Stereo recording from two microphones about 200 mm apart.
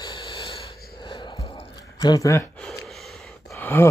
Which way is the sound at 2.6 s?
Centre (ahead or behind).